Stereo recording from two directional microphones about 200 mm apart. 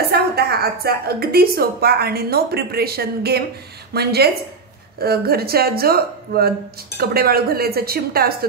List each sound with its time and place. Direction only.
0.1 s a woman's voice: 50° right (ahead or behind)